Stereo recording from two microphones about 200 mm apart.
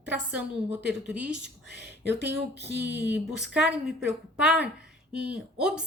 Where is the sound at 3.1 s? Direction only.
5° right (ahead or behind).